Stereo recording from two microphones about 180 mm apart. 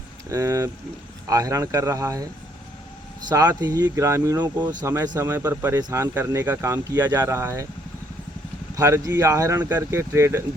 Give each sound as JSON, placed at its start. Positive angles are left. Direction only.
{"t": 0.3, "sound": "speech", "side_deg": -15}
{"t": 3.2, "sound": "speech", "side_deg": -20}
{"t": 8.7, "sound": "speech", "side_deg": -15}